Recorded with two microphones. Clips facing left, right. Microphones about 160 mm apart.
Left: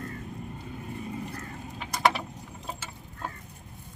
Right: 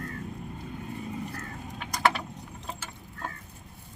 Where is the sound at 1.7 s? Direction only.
5° left (ahead or behind).